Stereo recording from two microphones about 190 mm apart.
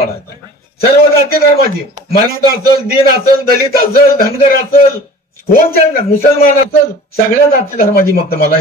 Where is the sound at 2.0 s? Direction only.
40° right (ahead or behind).